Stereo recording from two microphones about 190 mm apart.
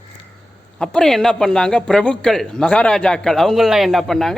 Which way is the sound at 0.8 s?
5° left (ahead or behind).